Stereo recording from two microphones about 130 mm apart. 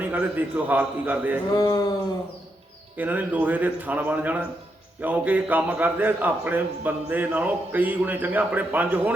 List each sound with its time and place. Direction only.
0.0 s a man's voice: 15° right (ahead or behind)
1.5 s a sound: 30° left (ahead or behind)
3.0 s a man's voice: 15° right (ahead or behind)